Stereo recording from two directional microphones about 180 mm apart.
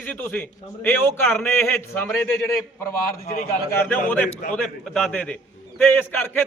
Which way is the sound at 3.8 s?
10° left (ahead or behind).